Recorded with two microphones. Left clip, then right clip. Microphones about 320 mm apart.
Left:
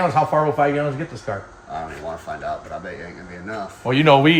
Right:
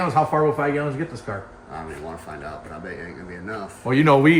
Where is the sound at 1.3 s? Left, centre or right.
Left.